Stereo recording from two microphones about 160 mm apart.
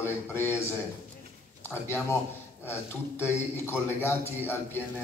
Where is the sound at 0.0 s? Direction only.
15° left (ahead or behind).